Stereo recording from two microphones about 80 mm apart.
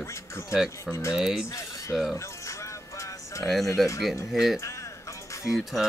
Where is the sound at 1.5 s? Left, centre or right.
Left.